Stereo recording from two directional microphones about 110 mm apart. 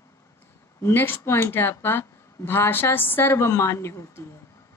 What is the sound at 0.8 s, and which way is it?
A woman's voice, 20° left (ahead or behind).